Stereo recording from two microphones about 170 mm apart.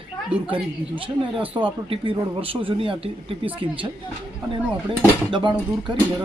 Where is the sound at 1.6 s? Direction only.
30° right (ahead or behind).